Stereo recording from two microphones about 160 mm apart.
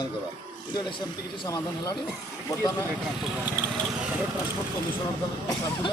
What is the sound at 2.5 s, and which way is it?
Speech, 20° left (ahead or behind).